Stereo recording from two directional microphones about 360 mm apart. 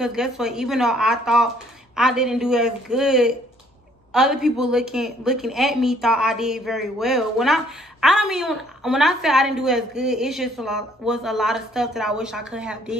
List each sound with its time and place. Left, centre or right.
0.0 s a woman's voice: centre